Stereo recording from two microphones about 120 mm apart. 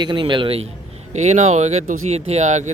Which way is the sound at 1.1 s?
75° right (ahead or behind).